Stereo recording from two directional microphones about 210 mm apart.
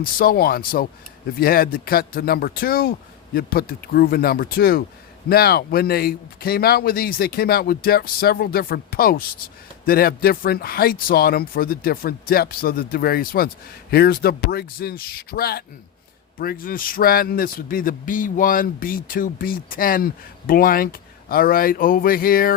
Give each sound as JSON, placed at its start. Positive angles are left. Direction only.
{"t": 0.0, "sound": "speech", "side_deg": 45}